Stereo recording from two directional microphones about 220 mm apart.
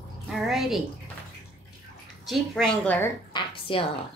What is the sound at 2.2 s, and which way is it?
Speech, centre (ahead or behind).